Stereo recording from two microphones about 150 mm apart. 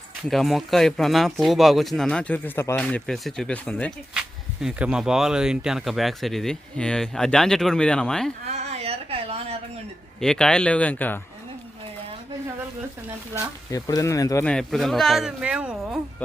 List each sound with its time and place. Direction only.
0.3 s speech: centre (ahead or behind)
4.6 s speech: 5° right (ahead or behind)
8.4 s a sound: 45° right (ahead or behind)
10.2 s speech: 5° left (ahead or behind)
13.7 s speech: 25° left (ahead or behind)
14.4 s speech: 5° left (ahead or behind)